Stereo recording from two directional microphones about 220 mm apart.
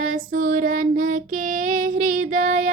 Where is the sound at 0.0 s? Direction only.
35° right (ahead or behind).